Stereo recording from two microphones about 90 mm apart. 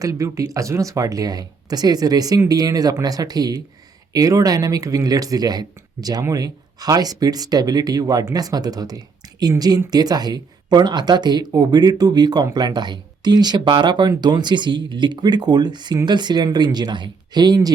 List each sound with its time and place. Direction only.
0.0 s speech: 40° right (ahead or behind)